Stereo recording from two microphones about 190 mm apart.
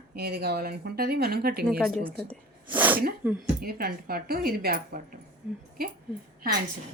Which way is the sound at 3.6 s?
55° right (ahead or behind).